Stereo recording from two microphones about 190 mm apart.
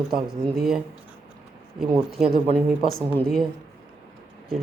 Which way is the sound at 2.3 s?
35° right (ahead or behind).